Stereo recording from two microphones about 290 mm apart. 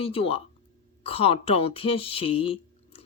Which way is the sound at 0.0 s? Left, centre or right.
Centre.